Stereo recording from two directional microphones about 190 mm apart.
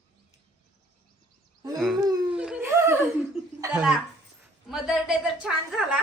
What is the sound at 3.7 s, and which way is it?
Speech, 5° right (ahead or behind).